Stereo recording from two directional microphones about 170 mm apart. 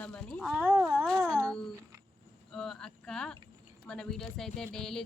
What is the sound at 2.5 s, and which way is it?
Speech, 5° left (ahead or behind).